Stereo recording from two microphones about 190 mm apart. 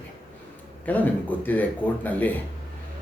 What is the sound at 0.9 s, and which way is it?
Speech, 10° left (ahead or behind).